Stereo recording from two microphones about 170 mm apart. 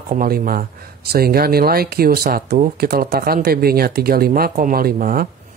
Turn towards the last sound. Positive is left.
turn(degrees=-60)  # may be behind; listen again after turning